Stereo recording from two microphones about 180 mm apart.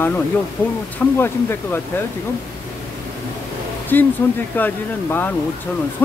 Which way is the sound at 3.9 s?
10° left (ahead or behind).